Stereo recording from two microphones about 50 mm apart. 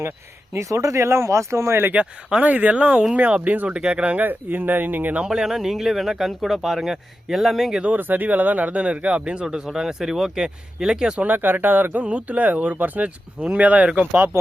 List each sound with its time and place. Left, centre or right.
0.5 s speech: right
2.4 s speech: right
3.8 s speech: right
4.3 s speech: right
5.2 s speech: centre
7.9 s speech: right; by 11.2 s centre
11.3 s speech: right